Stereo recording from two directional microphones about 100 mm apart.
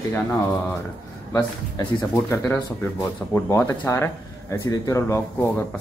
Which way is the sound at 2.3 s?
25° left (ahead or behind).